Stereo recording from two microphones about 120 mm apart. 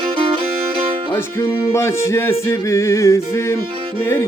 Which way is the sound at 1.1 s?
20° left (ahead or behind).